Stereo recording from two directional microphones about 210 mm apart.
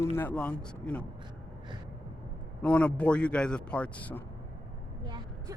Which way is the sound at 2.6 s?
5° left (ahead or behind).